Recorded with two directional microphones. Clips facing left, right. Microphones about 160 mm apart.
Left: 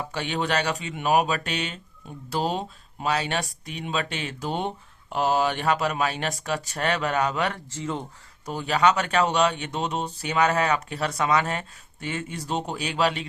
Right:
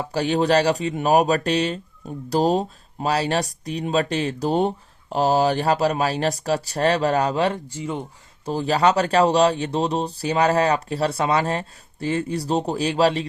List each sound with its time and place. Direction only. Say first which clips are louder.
0.1 s speech: right 9 dB; 35° right (ahead or behind)
7.7 s speech: right 2 dB; 10° right (ahead or behind)
8.4 s speech: right 3 dB; 35° right (ahead or behind)